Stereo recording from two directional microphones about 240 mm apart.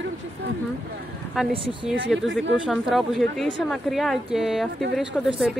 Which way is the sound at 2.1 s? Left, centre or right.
Centre.